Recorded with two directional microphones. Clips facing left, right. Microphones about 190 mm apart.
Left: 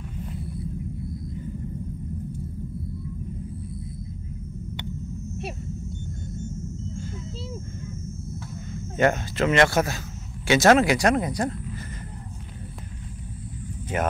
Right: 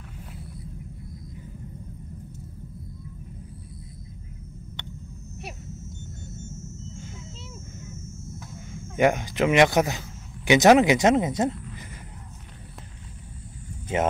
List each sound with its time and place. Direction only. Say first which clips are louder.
6.4 s rumble: left 8 dB; 25° right (ahead or behind)
8.7 s speech: right 1 dB; 10° right (ahead or behind)
13.9 s speech: right 2 dB; 25° right (ahead or behind)